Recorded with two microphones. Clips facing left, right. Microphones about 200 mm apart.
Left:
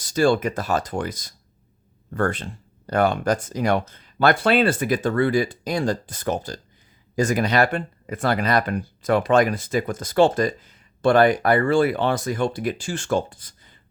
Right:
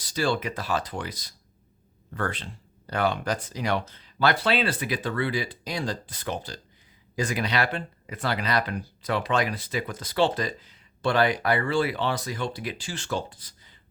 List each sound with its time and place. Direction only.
0.0 s speech: 45° left (ahead or behind)